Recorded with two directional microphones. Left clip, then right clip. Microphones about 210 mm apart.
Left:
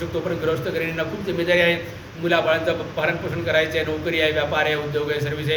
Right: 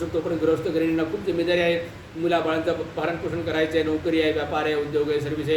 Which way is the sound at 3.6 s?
15° right (ahead or behind).